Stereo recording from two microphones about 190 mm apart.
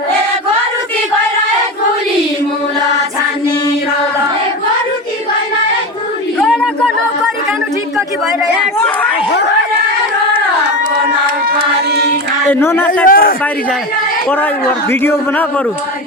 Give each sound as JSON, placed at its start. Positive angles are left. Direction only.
{"t": 6.4, "sound": "a sound", "side_deg": 0}
{"t": 11.9, "sound": "carnatic music", "side_deg": -60}
{"t": 12.5, "sound": "a man's voice", "side_deg": 10}
{"t": 13.1, "sound": "a man's voice", "side_deg": 50}
{"t": 14.3, "sound": "a man's voice", "side_deg": 10}